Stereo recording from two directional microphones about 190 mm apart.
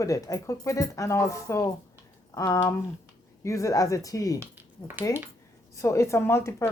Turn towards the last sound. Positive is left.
turn(degrees=15)  # may be behind; listen again after turning